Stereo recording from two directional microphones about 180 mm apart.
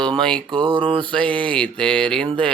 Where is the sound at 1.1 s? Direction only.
5° left (ahead or behind).